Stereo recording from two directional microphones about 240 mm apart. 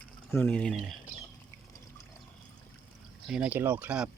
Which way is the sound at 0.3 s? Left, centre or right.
Centre.